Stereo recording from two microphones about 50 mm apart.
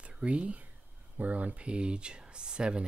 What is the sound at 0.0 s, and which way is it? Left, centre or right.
Speech, right.